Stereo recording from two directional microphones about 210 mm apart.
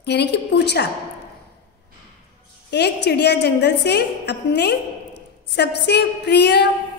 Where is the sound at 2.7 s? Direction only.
55° left (ahead or behind).